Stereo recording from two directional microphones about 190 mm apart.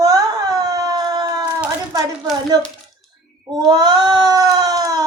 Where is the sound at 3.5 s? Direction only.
20° right (ahead or behind).